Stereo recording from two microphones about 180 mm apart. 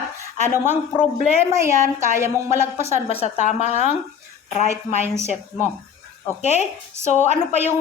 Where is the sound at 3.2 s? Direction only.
40° left (ahead or behind).